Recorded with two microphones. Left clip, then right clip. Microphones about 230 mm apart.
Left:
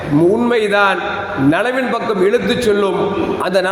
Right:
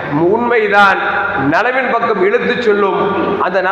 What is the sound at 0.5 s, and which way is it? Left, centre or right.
Speech, left.